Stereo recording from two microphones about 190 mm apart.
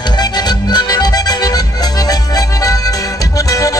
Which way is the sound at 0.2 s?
20° left (ahead or behind).